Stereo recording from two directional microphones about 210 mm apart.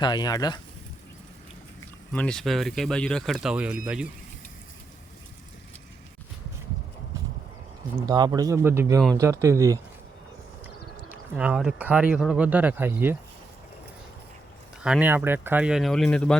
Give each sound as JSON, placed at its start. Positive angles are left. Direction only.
{"t": 0.0, "sound": "speech", "side_deg": 20}
{"t": 2.1, "sound": "speech", "side_deg": 5}
{"t": 8.0, "sound": "speech", "side_deg": -20}
{"t": 11.1, "sound": "speech", "side_deg": -5}
{"t": 14.8, "sound": "speech", "side_deg": -5}